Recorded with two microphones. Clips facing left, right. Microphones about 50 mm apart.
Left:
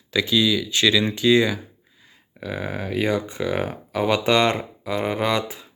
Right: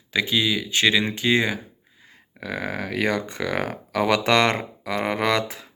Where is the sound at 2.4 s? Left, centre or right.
Right.